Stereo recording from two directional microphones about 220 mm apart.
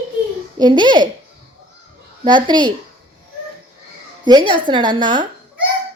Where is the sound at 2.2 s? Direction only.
20° right (ahead or behind).